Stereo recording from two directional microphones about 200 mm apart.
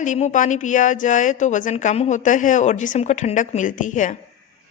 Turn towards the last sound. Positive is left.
turn(degrees=40)  # may be behind; listen again after turning